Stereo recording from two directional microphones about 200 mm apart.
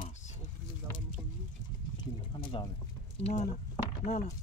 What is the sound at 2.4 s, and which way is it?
Speech, 25° left (ahead or behind).